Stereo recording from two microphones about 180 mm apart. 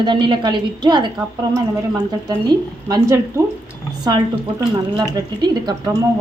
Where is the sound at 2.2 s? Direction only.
20° right (ahead or behind).